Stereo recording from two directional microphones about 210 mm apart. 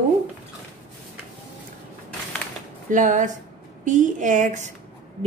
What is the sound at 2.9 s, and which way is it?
A woman's voice, 35° right (ahead or behind).